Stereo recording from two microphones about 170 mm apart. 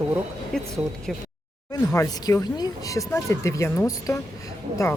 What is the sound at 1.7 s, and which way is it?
Speech, 15° left (ahead or behind).